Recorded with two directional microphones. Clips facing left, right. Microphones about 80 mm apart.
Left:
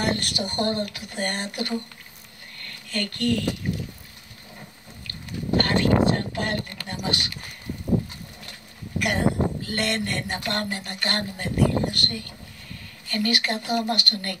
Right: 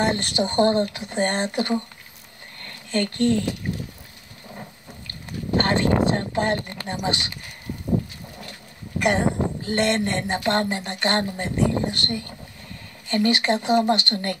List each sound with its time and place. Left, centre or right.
0.0 s speech: right
3.7 s vehicle: right
5.6 s speech: right
9.0 s speech: right